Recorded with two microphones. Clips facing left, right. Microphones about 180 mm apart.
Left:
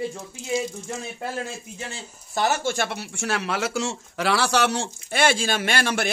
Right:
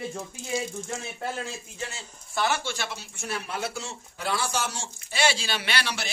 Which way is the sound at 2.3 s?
40° left (ahead or behind).